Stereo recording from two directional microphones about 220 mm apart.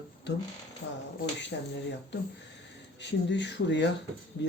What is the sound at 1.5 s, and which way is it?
Speech, 50° left (ahead or behind).